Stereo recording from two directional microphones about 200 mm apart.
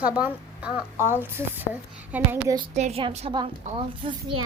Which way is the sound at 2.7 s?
30° right (ahead or behind).